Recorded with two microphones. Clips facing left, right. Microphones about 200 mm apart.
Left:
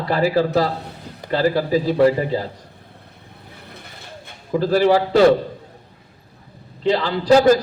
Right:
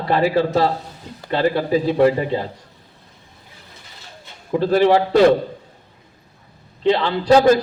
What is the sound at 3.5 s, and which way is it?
Vehicle, 60° left (ahead or behind).